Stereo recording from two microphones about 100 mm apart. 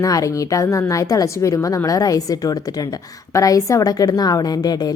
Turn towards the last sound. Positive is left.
turn(degrees=40)  # may be behind; listen again after turning